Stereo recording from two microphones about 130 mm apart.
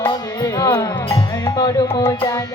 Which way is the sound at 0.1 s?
30° left (ahead or behind).